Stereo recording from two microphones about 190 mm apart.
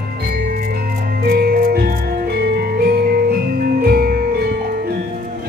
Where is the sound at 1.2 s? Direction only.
50° right (ahead or behind).